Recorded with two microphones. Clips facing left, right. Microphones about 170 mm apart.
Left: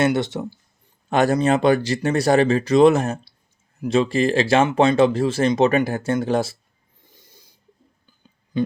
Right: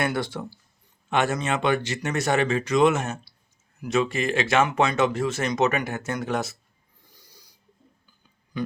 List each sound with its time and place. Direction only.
0.0 s speech: 20° left (ahead or behind)
1.1 s speech: 35° left (ahead or behind)
7.0 s owl: 25° left (ahead or behind)
8.5 s speech: 25° left (ahead or behind)